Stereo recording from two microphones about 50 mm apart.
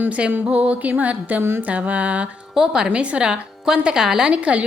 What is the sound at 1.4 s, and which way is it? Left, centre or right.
Music, right.